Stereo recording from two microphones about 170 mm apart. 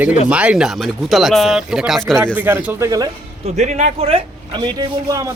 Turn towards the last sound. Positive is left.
turn(degrees=-20)  # may be behind; listen again after turning